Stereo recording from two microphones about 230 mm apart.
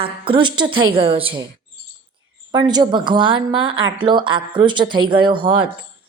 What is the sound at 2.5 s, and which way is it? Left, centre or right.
Speech, centre.